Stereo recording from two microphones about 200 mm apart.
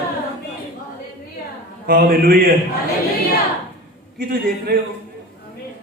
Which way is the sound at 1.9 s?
45° right (ahead or behind).